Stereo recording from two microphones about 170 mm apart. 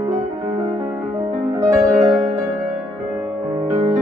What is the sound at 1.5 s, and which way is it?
Music, 20° right (ahead or behind).